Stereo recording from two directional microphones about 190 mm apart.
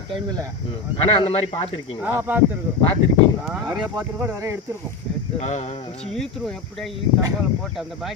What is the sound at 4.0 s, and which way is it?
Speech, 15° right (ahead or behind).